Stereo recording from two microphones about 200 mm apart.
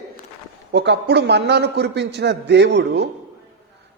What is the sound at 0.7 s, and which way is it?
A man's voice, 55° right (ahead or behind).